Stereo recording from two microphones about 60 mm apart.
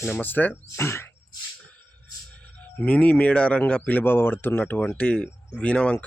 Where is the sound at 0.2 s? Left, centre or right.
Left.